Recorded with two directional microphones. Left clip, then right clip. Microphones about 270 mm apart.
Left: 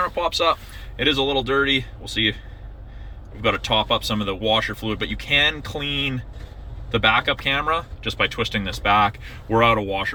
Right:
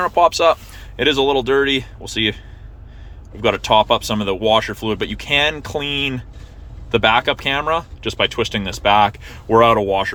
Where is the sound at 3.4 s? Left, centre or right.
Centre.